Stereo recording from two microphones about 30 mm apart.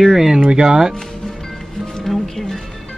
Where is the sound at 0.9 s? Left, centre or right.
Centre.